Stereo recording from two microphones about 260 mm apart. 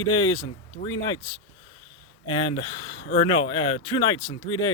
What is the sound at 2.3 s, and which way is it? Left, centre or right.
Speech, centre.